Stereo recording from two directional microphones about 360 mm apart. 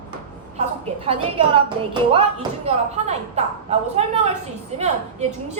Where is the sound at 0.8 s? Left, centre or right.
Centre.